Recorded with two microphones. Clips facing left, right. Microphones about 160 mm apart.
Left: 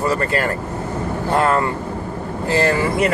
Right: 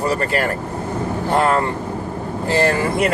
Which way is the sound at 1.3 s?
25° right (ahead or behind).